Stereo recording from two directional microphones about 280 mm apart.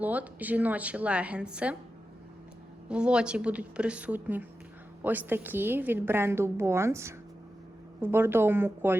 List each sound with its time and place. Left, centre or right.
0.0 s a woman's voice: centre
2.9 s a woman's voice: centre